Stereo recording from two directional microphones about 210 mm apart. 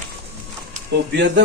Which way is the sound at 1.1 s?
60° right (ahead or behind).